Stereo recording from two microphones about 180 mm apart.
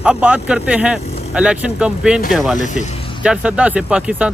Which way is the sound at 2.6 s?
40° left (ahead or behind).